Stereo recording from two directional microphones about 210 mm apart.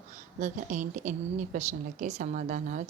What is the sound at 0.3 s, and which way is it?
A woman's voice, 35° right (ahead or behind).